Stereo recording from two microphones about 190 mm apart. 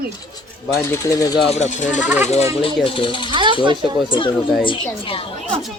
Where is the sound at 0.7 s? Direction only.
15° left (ahead or behind).